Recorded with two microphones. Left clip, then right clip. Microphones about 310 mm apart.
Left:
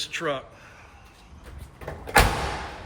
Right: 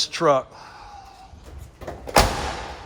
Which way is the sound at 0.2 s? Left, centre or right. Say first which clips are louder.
Right 11 dB; centre.